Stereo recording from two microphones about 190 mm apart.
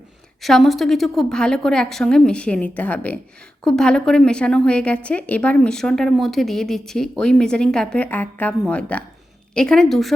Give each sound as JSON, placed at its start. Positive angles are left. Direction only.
{"t": 0.4, "sound": "a woman's voice", "side_deg": 0}